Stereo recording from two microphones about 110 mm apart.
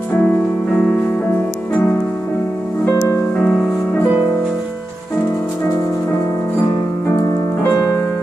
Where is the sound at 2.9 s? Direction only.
30° left (ahead or behind); by 4.0 s 15° left (ahead or behind).